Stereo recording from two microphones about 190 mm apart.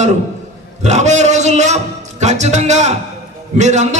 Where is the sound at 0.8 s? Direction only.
40° right (ahead or behind).